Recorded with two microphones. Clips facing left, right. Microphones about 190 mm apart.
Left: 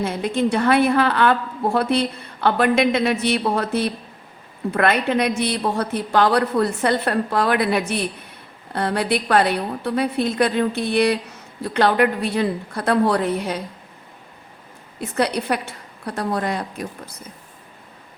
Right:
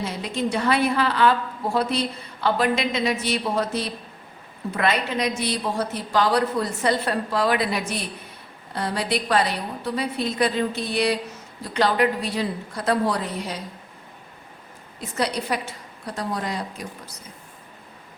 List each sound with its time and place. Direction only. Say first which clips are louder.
0.0 s a woman's voice: left 6 dB; 55° left (ahead or behind)
15.1 s a woman's voice: left 4 dB; 60° left (ahead or behind)